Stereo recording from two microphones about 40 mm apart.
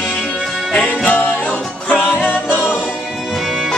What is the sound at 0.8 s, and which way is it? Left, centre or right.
Music, left.